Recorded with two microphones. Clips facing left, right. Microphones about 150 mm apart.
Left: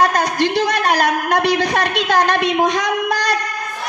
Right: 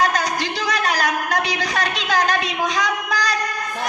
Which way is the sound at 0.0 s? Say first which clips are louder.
Left 5 dB; 50° left (ahead or behind).